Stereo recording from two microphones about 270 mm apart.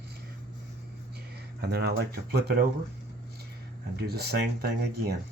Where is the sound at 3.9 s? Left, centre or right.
Right.